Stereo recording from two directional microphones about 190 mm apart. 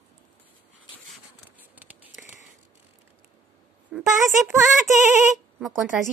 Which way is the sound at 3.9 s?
5° right (ahead or behind).